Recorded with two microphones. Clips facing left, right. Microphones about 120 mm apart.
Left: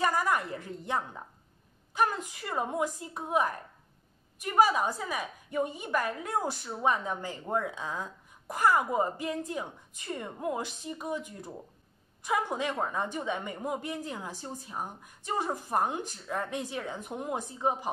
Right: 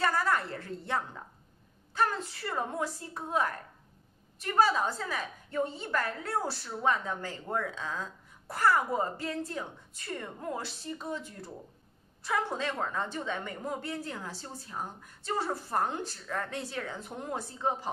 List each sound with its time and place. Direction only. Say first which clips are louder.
0.0 s a woman's voice: left 1 dB; 15° left (ahead or behind)